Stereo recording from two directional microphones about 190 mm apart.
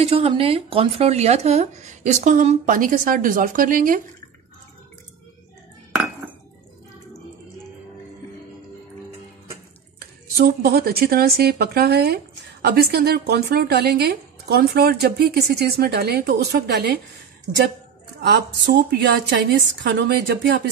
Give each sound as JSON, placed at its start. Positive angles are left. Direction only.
{"t": 0.0, "sound": "speech", "side_deg": -30}
{"t": 9.9, "sound": "speech", "side_deg": -55}
{"t": 18.3, "sound": "speech", "side_deg": -60}